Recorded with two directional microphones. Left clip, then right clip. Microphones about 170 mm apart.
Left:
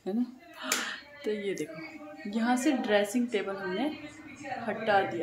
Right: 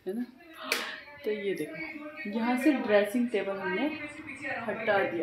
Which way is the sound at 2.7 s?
15° right (ahead or behind).